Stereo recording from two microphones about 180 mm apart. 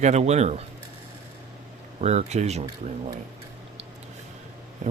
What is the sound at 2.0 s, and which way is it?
Speech, 40° right (ahead or behind).